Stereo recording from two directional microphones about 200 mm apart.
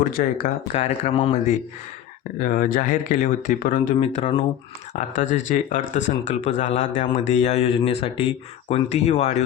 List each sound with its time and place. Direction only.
0.1 s a man's voice: 40° left (ahead or behind)
2.4 s a man's voice: 45° left (ahead or behind)